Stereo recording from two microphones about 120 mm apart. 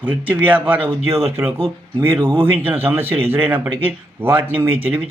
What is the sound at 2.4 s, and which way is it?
Speech, 15° right (ahead or behind).